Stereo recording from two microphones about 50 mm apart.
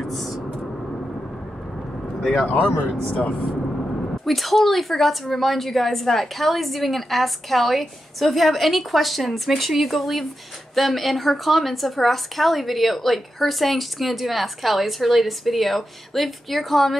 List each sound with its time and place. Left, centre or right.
0.0 s a sound: centre
3.1 s speech: left
4.3 s a woman's voice: centre